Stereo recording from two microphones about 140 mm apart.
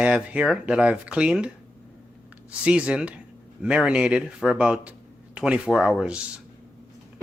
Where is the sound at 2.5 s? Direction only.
10° right (ahead or behind).